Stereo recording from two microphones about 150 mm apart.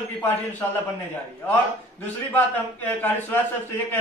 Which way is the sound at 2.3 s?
10° left (ahead or behind).